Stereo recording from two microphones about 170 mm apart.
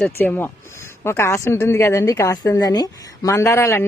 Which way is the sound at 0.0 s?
10° left (ahead or behind).